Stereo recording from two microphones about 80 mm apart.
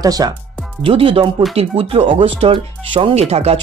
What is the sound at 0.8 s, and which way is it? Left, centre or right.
Speech, right.